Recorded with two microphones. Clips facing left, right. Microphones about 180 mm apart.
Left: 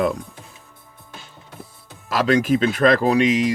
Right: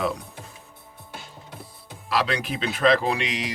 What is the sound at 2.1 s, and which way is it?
Speech, 45° left (ahead or behind).